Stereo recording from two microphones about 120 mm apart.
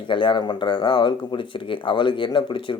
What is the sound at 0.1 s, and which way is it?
Speech, 45° left (ahead or behind).